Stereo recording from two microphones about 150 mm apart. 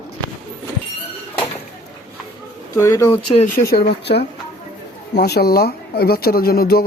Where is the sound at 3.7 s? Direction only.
90° left.